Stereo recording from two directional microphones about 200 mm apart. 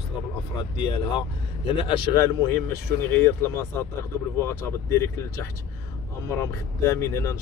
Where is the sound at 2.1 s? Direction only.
15° left (ahead or behind).